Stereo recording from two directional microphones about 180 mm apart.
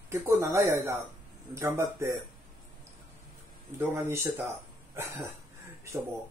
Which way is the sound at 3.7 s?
15° right (ahead or behind).